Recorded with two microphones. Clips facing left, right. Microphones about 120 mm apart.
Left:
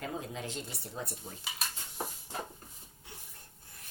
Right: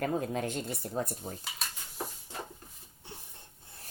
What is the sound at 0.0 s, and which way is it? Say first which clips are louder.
Speech: right 7 dB; 55° right (ahead or behind).